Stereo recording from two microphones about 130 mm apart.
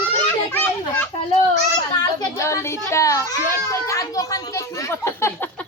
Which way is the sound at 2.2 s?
20° left (ahead or behind).